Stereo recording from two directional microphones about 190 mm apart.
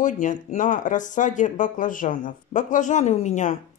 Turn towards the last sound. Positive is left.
turn(degrees=40)  # may be behind; listen again after turning